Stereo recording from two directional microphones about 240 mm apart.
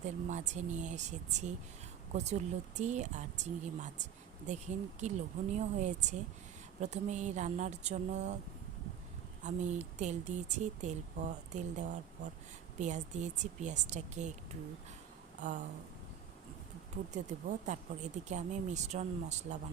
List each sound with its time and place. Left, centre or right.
0.0 s speech: right
9.4 s speech: right
15.4 s a sound: right
17.7 s speech: right